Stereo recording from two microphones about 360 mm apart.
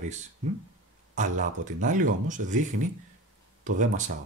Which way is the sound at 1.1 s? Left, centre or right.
Right.